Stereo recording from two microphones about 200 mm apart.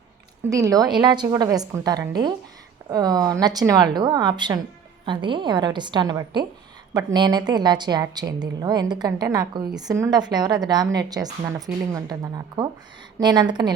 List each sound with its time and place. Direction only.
0.5 s a woman's voice: 15° right (ahead or behind)